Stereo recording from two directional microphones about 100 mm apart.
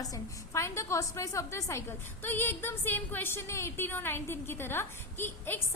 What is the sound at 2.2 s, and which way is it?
A woman's voice, 20° left (ahead or behind).